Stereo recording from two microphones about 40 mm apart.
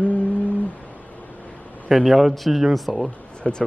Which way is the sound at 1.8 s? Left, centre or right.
Centre.